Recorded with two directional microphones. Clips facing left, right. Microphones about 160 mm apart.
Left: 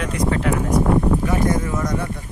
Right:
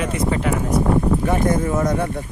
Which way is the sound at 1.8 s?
55° right (ahead or behind).